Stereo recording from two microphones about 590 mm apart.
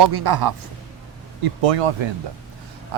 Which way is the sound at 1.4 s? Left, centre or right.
Right.